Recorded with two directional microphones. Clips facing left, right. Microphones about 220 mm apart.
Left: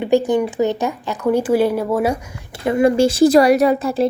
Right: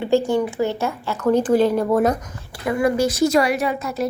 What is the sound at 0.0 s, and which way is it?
A woman's voice, 15° left (ahead or behind).